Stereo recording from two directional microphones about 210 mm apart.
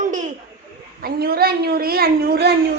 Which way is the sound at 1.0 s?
45° right (ahead or behind).